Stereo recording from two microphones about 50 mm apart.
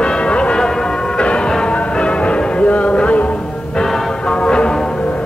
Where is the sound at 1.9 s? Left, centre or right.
Left.